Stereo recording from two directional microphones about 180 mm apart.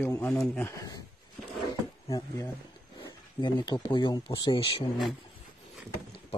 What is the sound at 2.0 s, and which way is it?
Speech, 20° left (ahead or behind).